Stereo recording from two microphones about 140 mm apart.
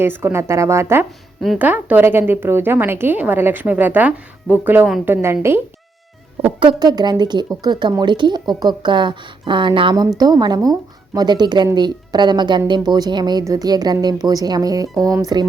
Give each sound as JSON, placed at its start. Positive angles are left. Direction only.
{"t": 0.0, "sound": "a woman's voice", "side_deg": -15}
{"t": 6.4, "sound": "speech", "side_deg": -35}